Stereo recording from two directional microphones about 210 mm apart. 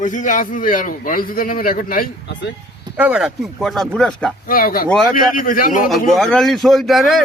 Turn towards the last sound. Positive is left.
turn(degrees=0)  # may be behind; listen again after turning